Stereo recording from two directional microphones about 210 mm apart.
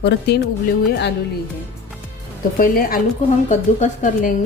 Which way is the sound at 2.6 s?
45° left (ahead or behind).